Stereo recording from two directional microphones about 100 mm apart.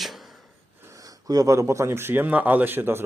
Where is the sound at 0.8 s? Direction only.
35° right (ahead or behind).